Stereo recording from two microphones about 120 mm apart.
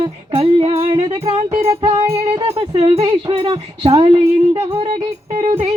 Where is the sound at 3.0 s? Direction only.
40° right (ahead or behind).